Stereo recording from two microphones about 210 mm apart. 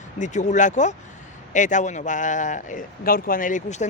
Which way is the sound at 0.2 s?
35° left (ahead or behind).